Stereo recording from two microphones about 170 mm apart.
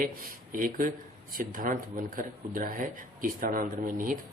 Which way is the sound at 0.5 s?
55° right (ahead or behind).